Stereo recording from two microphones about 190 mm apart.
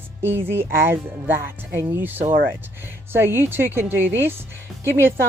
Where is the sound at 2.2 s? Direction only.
45° right (ahead or behind).